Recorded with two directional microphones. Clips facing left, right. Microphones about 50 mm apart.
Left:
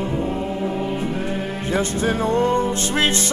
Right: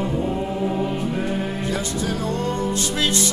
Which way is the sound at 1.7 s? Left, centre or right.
Left.